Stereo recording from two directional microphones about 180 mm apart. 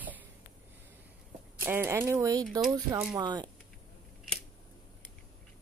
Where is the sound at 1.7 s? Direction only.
10° right (ahead or behind).